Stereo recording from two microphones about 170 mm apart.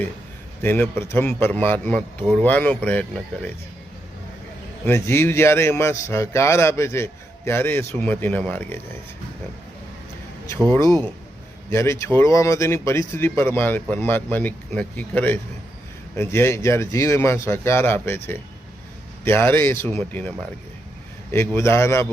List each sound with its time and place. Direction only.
0.6 s a man's voice: 10° left (ahead or behind)
4.9 s a man's voice: 15° left (ahead or behind)
11.7 s a man's voice: 15° left (ahead or behind)
21.3 s a man's voice: 15° left (ahead or behind)